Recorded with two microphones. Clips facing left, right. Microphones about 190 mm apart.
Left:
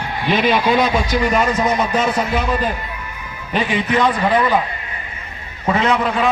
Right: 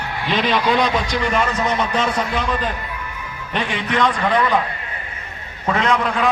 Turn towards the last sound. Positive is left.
turn(degrees=5)  # may be behind; listen again after turning